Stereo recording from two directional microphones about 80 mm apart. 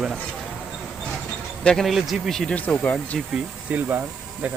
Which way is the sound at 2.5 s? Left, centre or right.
Centre.